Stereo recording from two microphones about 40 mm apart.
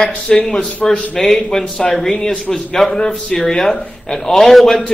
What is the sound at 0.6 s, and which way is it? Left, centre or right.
Speech, left.